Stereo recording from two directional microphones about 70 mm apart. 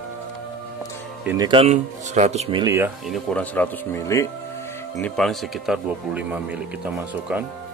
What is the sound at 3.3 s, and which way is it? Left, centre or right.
Speech, left.